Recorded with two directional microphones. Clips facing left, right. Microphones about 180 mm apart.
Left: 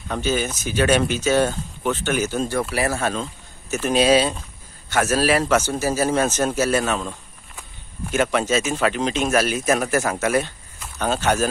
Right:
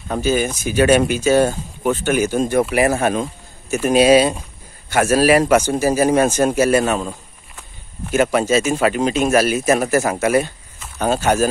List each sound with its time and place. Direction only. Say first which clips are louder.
0.1 s speech: right 5 dB; 10° right (ahead or behind)